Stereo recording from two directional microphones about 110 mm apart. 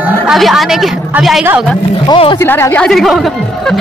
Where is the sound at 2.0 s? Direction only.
55° left (ahead or behind).